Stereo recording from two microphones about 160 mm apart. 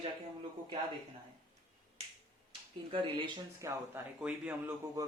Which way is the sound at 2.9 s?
30° right (ahead or behind).